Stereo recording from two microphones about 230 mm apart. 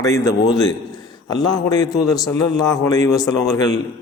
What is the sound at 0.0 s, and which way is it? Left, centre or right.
Speech, centre.